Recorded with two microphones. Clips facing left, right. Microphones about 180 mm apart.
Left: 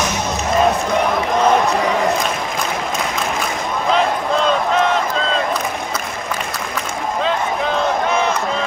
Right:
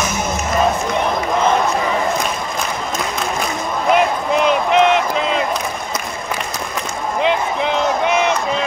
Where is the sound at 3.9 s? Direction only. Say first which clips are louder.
Right 2 dB; 15° right (ahead or behind).